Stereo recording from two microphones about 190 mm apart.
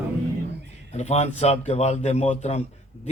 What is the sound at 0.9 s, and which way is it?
A man's voice, 35° left (ahead or behind).